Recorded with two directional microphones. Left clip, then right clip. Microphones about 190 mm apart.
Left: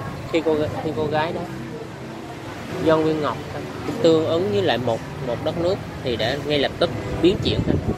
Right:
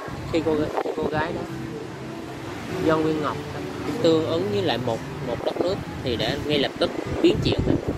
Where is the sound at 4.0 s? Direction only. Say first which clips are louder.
Left 3 dB; 10° right (ahead or behind).